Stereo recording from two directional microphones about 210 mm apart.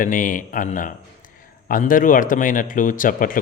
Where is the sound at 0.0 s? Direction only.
40° left (ahead or behind).